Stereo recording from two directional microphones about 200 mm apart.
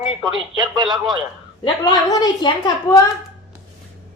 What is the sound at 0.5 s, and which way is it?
Speech, 20° right (ahead or behind).